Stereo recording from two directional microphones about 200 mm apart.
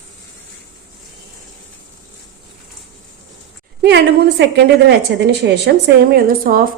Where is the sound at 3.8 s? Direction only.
55° right (ahead or behind).